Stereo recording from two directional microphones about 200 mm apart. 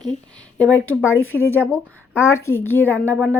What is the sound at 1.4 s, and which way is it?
A woman's voice, 10° left (ahead or behind).